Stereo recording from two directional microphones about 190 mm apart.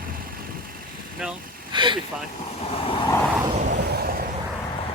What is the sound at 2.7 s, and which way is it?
Vehicle, 30° left (ahead or behind).